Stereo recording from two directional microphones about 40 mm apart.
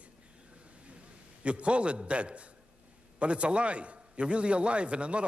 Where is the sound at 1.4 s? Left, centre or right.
Right.